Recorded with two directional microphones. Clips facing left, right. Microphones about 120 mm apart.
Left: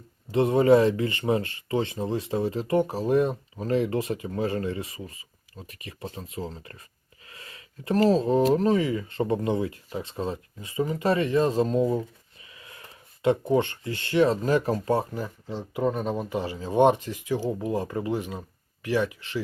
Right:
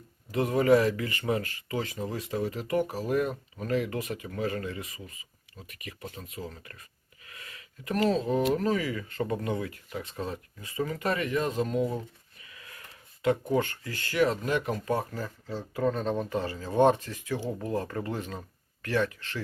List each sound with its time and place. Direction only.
0.3 s speech: 30° left (ahead or behind)
15.1 s speech: 20° left (ahead or behind)